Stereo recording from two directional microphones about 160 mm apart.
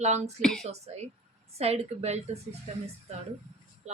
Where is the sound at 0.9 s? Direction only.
45° right (ahead or behind).